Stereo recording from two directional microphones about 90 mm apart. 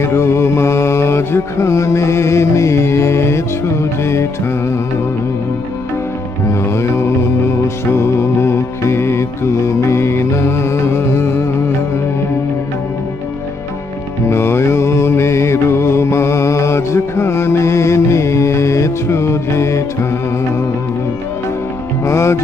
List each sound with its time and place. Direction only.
0.0 s mantra: 30° left (ahead or behind)
6.5 s music: 30° left (ahead or behind)
14.3 s mantra: 25° left (ahead or behind)
22.0 s music: 30° left (ahead or behind)